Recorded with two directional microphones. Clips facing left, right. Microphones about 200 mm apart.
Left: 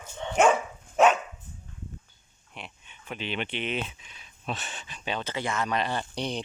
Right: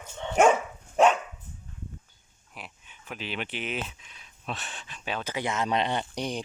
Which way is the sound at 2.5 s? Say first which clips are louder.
Left 1 dB; 5° right (ahead or behind).